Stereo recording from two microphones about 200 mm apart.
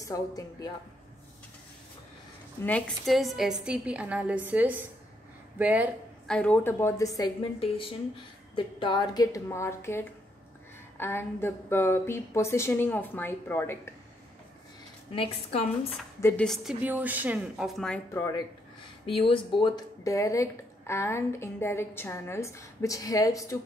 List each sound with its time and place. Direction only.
0.0 s speech: 15° left (ahead or behind)
2.6 s a woman's voice: 5° left (ahead or behind)
6.2 s speech: 5° left (ahead or behind)
7.6 s a woman's voice: 25° left (ahead or behind); by 13.7 s 10° left (ahead or behind)
15.1 s a woman's voice: 30° left (ahead or behind)
16.2 s speech: 10° left (ahead or behind)
16.4 s a woman's voice: 5° right (ahead or behind); by 18.4 s 15° left (ahead or behind)
19.0 s speech: 25° left (ahead or behind)